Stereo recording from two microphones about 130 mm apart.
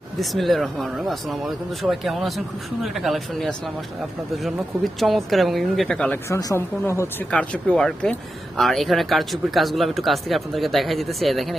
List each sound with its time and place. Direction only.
0.2 s speech: centre (ahead or behind)
6.2 s speech: 20° left (ahead or behind)
7.3 s speech: 10° left (ahead or behind)